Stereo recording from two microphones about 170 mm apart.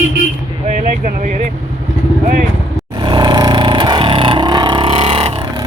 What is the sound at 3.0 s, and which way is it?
Vehicle, 25° right (ahead or behind).